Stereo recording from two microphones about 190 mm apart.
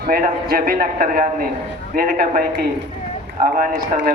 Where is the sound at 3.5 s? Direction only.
45° right (ahead or behind).